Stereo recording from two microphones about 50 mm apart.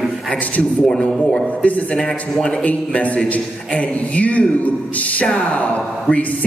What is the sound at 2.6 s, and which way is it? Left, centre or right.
A man's voice, left.